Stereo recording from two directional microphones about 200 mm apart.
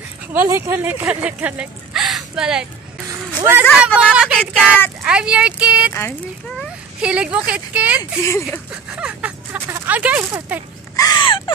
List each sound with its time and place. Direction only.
0.3 s speech: 10° right (ahead or behind)
8.5 s a sound: 5° right (ahead or behind)
11.0 s baby cry: 20° left (ahead or behind)